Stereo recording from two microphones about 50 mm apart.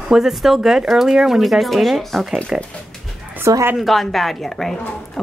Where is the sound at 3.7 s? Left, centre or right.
Centre.